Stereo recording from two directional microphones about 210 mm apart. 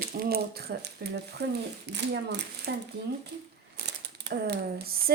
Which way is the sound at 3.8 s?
55° right (ahead or behind).